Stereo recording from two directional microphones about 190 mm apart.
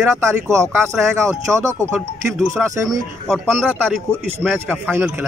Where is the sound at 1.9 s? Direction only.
Centre (ahead or behind).